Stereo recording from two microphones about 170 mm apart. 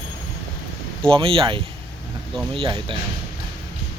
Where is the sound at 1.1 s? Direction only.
30° right (ahead or behind).